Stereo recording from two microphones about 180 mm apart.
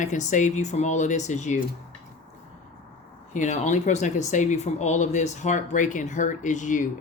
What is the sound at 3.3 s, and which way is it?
Speech, 40° left (ahead or behind).